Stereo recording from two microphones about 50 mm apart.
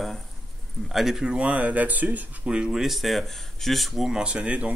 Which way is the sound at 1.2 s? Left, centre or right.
Right.